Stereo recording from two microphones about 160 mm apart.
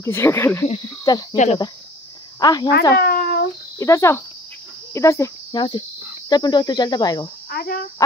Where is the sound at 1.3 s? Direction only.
50° left (ahead or behind).